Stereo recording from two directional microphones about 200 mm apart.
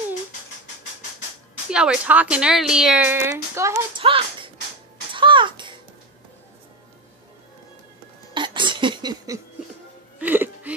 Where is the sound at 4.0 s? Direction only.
25° right (ahead or behind).